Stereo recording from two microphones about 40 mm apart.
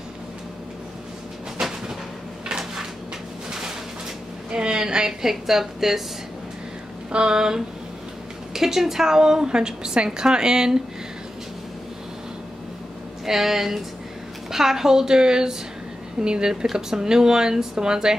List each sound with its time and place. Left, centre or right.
1.6 s a sound: centre
2.4 s drawer open or close: centre
4.5 s a woman's voice: right
5.3 s a woman's voice: centre
7.1 s a woman's voice: centre
13.2 s a woman's voice: centre